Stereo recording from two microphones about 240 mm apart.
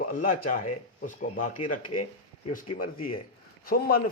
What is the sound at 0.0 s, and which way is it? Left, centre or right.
Speech, left.